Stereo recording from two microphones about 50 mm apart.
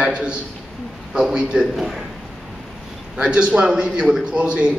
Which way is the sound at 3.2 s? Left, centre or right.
Centre.